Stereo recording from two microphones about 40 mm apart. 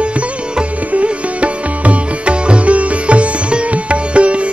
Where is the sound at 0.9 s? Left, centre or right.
Right.